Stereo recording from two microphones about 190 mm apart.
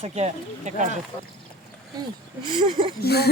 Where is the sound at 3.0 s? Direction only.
55° left (ahead or behind).